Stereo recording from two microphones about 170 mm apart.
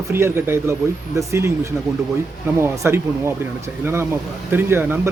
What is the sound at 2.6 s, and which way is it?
Speech, 15° right (ahead or behind).